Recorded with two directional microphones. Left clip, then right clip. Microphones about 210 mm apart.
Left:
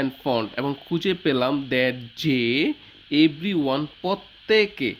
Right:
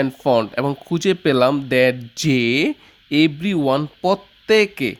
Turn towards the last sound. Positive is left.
turn(degrees=-60)  # may be behind; listen again after turning